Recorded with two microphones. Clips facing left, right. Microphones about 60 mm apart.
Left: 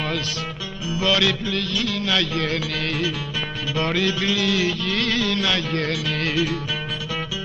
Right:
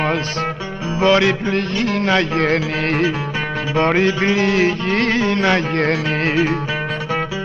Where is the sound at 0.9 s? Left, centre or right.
Right.